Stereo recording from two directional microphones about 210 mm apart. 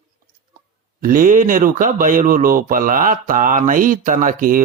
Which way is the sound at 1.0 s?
40° right (ahead or behind).